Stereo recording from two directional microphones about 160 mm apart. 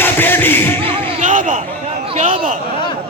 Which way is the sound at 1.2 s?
55° right (ahead or behind).